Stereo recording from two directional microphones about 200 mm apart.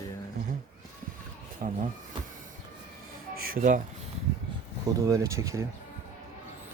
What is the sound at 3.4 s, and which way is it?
Speech, 45° right (ahead or behind).